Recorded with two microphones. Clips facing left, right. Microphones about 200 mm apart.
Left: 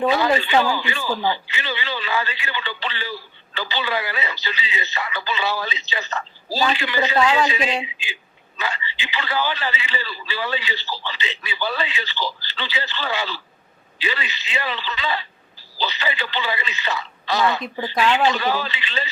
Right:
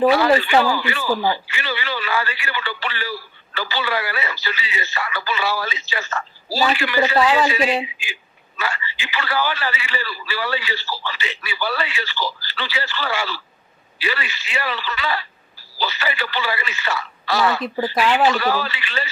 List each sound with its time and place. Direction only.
0.1 s a man's voice: 20° left (ahead or behind)
6.5 s a woman's voice: 10° right (ahead or behind)
6.7 s a man's voice: 20° left (ahead or behind)